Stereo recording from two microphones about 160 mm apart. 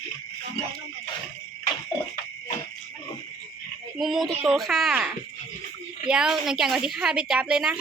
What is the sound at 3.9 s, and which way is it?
A woman's voice, centre (ahead or behind).